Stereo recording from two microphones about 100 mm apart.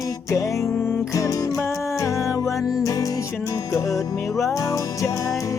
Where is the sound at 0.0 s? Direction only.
35° left (ahead or behind).